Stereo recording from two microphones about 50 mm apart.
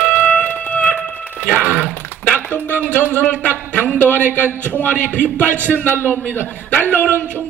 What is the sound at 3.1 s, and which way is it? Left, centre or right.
A man's voice, left.